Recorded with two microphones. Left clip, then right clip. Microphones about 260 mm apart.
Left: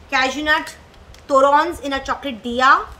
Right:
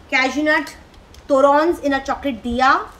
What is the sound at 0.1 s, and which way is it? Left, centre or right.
A woman's voice, left.